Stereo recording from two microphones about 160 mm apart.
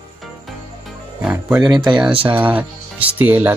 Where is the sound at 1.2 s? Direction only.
10° right (ahead or behind).